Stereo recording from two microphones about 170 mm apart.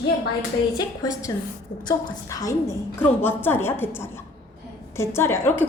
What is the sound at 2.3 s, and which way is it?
A woman's voice, 20° left (ahead or behind).